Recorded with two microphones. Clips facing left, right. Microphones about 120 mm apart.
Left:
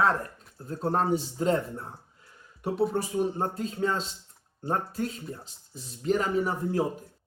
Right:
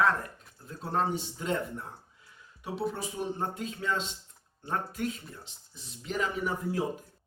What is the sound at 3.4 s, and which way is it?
Speech, 40° left (ahead or behind).